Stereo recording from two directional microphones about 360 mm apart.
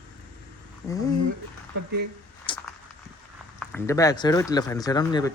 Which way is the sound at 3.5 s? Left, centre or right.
Centre.